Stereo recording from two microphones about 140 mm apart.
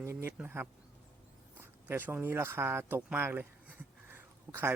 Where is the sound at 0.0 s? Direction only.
20° right (ahead or behind).